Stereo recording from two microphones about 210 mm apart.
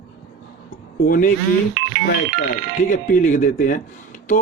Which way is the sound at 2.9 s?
40° left (ahead or behind).